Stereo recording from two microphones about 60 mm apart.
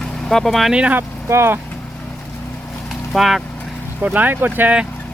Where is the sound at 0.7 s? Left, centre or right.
Centre.